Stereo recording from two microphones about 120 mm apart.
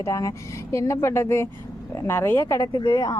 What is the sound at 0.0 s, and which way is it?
Speech, 25° left (ahead or behind).